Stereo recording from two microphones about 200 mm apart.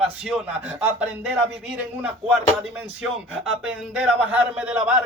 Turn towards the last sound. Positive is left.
turn(degrees=-5)  # may be behind; listen again after turning